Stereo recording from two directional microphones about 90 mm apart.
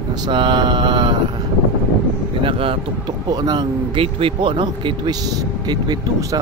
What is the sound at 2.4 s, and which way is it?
Speech, 85° right.